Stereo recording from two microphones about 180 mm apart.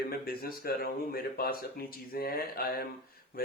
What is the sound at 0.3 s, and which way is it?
Speech, 55° left (ahead or behind).